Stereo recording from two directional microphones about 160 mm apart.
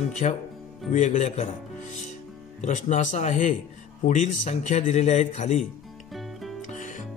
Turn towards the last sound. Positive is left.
turn(degrees=50)  # may be behind; listen again after turning